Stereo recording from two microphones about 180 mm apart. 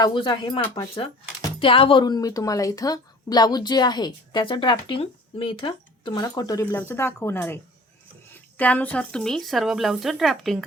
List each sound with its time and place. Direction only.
0.0 s speech: 25° left (ahead or behind); by 10.6 s centre (ahead or behind)